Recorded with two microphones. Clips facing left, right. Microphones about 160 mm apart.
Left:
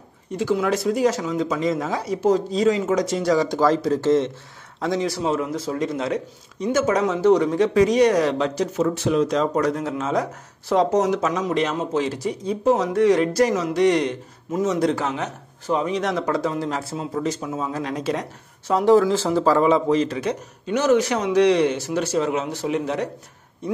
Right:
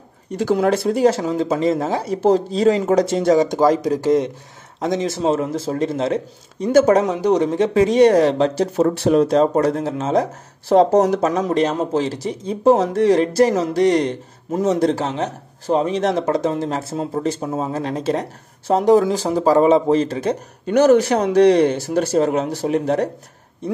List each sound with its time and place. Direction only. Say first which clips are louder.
0.4 s speech: right 4 dB; 40° right (ahead or behind)
7.1 s speech: even; 15° right (ahead or behind)
16.9 s speech: right 3 dB; 40° right (ahead or behind)
17.7 s speech: right 3 dB; 30° right (ahead or behind)
19.1 s speech: right 3 dB; 15° right (ahead or behind)
19.6 s speech: right 4 dB; 30° right (ahead or behind)
20.0 s speech: right 3 dB; 45° right (ahead or behind)